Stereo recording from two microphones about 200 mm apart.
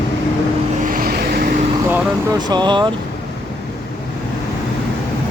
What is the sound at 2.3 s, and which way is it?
Speech, 20° right (ahead or behind).